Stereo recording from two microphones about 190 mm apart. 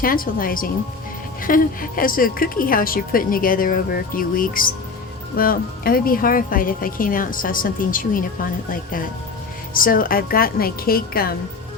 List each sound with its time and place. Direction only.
0.0 s a woman's voice: 50° left (ahead or behind)